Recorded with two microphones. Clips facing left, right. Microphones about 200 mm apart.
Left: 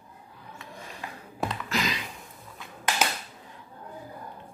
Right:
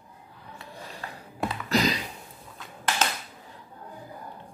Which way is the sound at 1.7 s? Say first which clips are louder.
Right 9 dB; 35° right (ahead or behind).